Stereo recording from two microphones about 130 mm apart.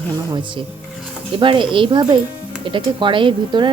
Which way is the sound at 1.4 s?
40° right (ahead or behind).